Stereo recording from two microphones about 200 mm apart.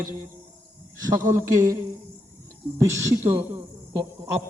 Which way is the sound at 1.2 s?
15° right (ahead or behind).